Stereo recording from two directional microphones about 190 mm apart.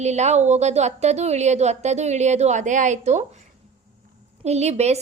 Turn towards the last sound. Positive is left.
turn(degrees=-35)  # may be behind; listen again after turning